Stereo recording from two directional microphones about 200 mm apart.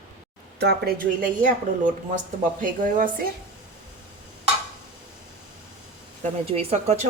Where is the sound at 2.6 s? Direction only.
40° right (ahead or behind).